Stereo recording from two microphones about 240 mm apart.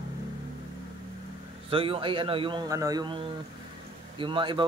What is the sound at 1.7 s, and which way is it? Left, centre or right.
A man's voice, right.